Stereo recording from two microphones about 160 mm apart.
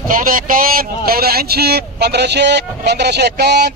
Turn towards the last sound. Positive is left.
turn(degrees=-90)